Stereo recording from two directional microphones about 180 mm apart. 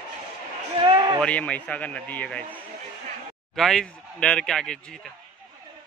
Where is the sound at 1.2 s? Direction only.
5° left (ahead or behind).